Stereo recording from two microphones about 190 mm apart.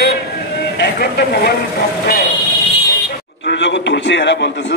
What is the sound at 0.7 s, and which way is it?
Speech, 60° left (ahead or behind).